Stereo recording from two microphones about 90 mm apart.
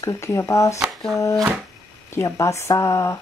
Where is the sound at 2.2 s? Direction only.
35° left (ahead or behind).